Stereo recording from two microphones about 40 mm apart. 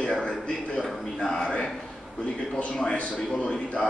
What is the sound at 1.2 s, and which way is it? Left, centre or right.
A man's voice, left.